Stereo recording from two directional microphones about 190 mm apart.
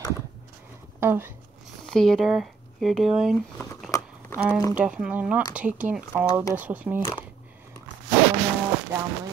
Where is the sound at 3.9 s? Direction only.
15° left (ahead or behind).